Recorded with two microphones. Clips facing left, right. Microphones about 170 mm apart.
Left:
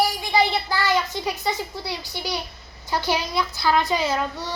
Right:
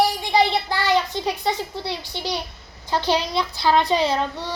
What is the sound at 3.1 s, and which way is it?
Speech, 25° right (ahead or behind).